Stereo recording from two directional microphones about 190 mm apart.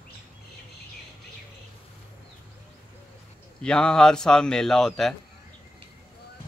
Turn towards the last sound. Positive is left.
turn(degrees=0)  # may be behind; listen again after turning